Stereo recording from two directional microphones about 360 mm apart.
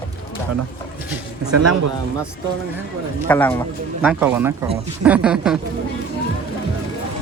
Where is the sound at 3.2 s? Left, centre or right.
Centre.